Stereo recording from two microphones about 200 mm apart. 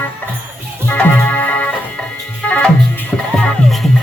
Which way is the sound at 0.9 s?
10° left (ahead or behind).